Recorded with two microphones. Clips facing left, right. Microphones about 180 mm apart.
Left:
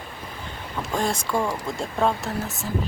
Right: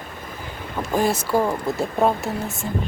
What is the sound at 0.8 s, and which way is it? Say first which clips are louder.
Speech: right 5 dB; 5° right (ahead or behind).